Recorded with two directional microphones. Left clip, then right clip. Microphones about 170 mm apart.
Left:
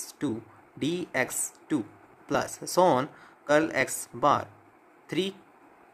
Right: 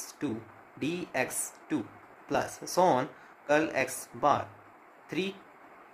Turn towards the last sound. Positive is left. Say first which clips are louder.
# left 4 dB
turn(degrees=20)  # may be behind; listen again after turning